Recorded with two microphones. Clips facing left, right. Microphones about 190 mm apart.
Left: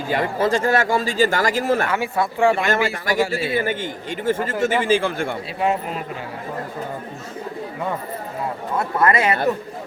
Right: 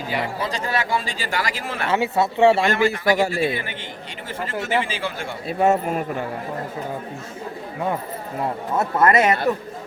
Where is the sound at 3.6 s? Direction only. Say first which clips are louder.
Left 9 dB; 45° left (ahead or behind).